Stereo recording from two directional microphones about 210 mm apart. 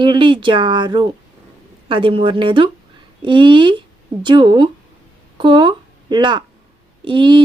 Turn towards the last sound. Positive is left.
turn(degrees=-20)  # may be behind; listen again after turning